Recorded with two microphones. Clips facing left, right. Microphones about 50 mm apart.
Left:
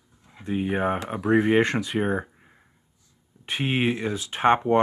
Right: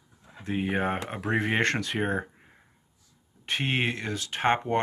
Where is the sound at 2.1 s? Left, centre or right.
Centre.